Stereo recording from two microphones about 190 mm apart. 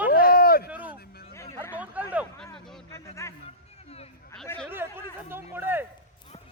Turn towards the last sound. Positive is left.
turn(degrees=-10)  # may be behind; listen again after turning